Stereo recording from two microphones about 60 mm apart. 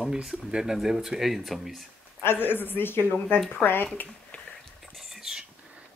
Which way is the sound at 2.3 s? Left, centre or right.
Left.